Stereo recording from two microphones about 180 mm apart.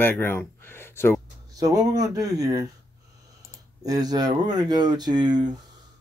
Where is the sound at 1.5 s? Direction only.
20° right (ahead or behind).